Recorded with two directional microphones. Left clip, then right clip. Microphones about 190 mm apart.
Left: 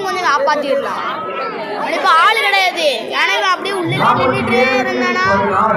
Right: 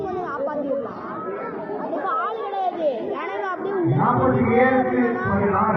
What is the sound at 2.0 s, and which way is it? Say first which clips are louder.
Speech: left 16 dB; 45° left (ahead or behind).